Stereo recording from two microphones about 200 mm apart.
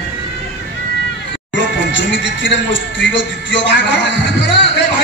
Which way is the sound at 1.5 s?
65° left (ahead or behind).